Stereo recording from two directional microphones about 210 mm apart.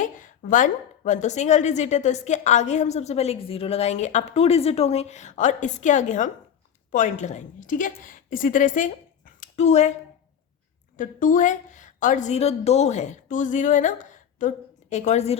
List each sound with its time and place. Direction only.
0.0 s a woman's voice: 40° left (ahead or behind)
10.9 s a woman's voice: 40° left (ahead or behind)